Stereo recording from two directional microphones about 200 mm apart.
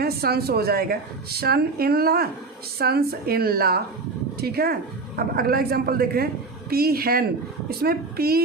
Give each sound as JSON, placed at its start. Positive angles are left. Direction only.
{"t": 0.0, "sound": "a woman's voice", "side_deg": -50}